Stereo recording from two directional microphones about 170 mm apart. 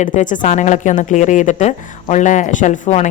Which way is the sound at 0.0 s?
50° left (ahead or behind).